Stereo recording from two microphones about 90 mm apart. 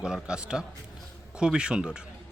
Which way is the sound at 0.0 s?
10° right (ahead or behind).